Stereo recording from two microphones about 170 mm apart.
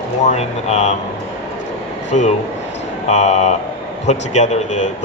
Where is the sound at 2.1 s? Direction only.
40° left (ahead or behind).